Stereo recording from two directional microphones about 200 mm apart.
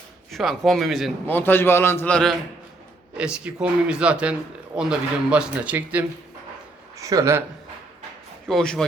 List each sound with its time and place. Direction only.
0.3 s a man's voice: centre (ahead or behind)
3.2 s a man's voice: 5° right (ahead or behind)
8.4 s a man's voice: 5° left (ahead or behind)